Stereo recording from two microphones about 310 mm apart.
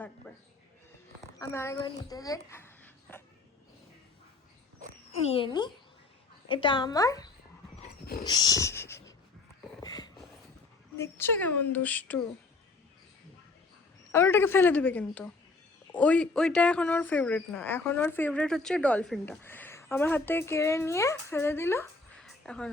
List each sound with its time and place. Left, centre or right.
1.4 s a child's voice: centre
5.3 s a woman's voice: centre
7.8 s dog: left
8.2 s speech: centre
9.8 s a sound: centre
10.9 s a woman's voice: centre
14.1 s a woman's voice: centre